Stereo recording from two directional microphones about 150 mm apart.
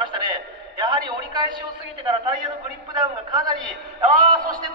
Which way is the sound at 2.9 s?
25° right (ahead or behind).